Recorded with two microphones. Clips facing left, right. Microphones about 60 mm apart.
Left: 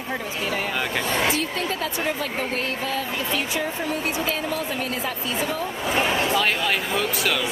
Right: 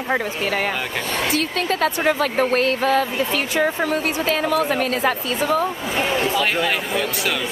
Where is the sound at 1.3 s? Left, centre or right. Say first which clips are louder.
Right 4 dB; right.